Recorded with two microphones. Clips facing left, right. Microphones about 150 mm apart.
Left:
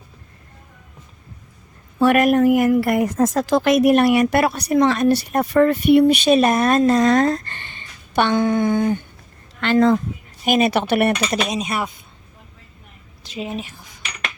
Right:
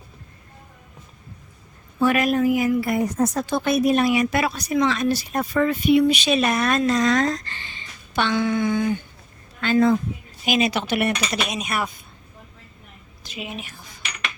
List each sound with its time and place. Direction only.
2.0 s a woman's voice: 60° left (ahead or behind)
9.6 s a woman's voice: 75° left (ahead or behind)
10.4 s speech: 55° left (ahead or behind); by 11.9 s 30° left (ahead or behind)
13.2 s a woman's voice: 35° left (ahead or behind)